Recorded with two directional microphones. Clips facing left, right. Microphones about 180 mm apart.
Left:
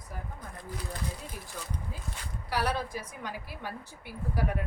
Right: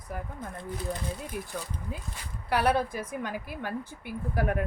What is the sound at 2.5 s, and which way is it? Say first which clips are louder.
A woman's voice: right 6 dB; 55° right (ahead or behind).